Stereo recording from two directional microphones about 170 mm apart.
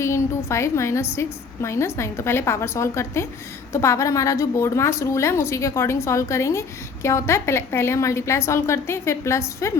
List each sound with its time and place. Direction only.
0.0 s a woman's voice: 15° left (ahead or behind)